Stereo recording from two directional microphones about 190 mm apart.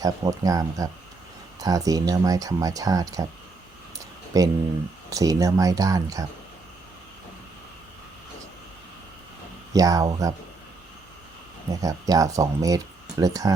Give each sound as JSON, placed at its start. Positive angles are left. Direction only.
{"t": 0.0, "sound": "speech", "side_deg": -20}
{"t": 4.3, "sound": "speech", "side_deg": -20}
{"t": 9.7, "sound": "speech", "side_deg": -20}
{"t": 11.7, "sound": "speech", "side_deg": -20}